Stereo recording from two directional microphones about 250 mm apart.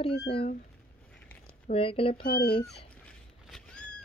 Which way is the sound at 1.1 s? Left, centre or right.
Centre.